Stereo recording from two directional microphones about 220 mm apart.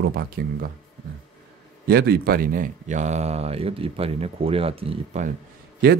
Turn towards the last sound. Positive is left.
turn(degrees=-45)  # may be behind; listen again after turning